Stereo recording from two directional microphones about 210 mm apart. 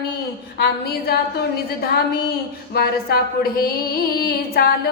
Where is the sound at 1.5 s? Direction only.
50° left (ahead or behind).